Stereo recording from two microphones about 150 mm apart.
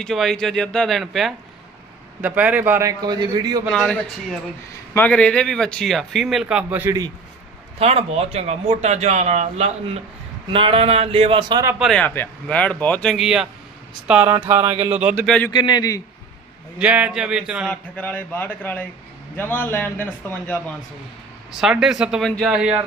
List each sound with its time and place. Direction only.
0.0 s speech: centre (ahead or behind)
2.2 s a man's voice: 10° right (ahead or behind)
3.0 s a man's voice: 30° right (ahead or behind)
3.7 s a man's voice: 5° left (ahead or behind); by 7.0 s 15° right (ahead or behind)
7.8 s speech: 40° right (ahead or behind)
10.5 s speech: 35° right (ahead or behind)
11.8 s a man's voice: 5° left (ahead or behind)
14.7 s speech: 45° right (ahead or behind)
14.9 s a man's voice: 10° right (ahead or behind)
15.5 s a man's voice: 30° left (ahead or behind)
16.8 s speech: 10° right (ahead or behind)
17.7 s speech: 10° left (ahead or behind)
21.5 s speech: 5° right (ahead or behind)